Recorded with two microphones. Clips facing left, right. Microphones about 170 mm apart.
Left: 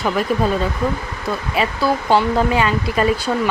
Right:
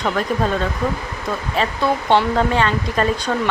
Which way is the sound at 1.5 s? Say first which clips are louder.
Left 1 dB; 5° left (ahead or behind).